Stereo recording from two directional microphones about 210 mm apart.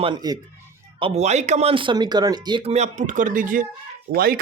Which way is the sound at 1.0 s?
30° right (ahead or behind).